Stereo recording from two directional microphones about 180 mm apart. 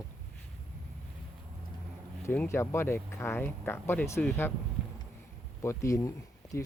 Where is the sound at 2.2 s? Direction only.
15° left (ahead or behind).